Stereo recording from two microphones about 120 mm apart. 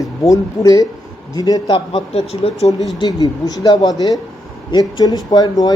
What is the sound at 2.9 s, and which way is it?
Speech, 35° left (ahead or behind).